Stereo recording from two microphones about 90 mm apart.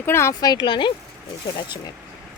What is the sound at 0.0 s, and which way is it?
Speech, 25° left (ahead or behind).